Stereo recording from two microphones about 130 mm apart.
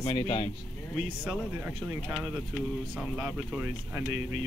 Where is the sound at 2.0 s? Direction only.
Centre (ahead or behind).